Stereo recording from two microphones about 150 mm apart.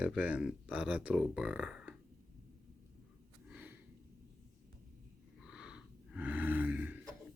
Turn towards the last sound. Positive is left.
turn(degrees=-10)  # may be behind; listen again after turning